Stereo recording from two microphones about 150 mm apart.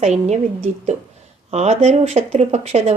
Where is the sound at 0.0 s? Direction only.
50° right (ahead or behind).